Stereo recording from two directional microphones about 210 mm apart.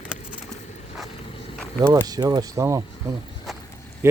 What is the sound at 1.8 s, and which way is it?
Speech, 15° right (ahead or behind).